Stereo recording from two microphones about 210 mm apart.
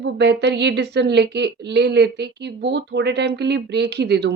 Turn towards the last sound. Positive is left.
turn(degrees=-50)  # may be behind; listen again after turning